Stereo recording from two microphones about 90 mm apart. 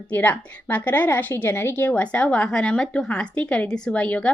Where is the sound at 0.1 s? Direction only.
15° left (ahead or behind).